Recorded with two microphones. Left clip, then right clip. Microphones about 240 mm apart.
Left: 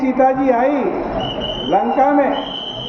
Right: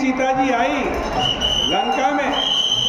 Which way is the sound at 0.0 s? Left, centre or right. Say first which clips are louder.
Left 4 dB; centre.